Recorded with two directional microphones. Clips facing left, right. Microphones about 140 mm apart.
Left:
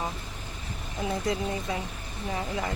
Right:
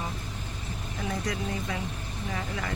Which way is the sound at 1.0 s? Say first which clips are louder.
Left 3 dB; 25° left (ahead or behind).